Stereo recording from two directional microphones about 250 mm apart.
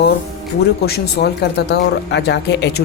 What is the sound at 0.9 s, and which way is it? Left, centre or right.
Speech, left.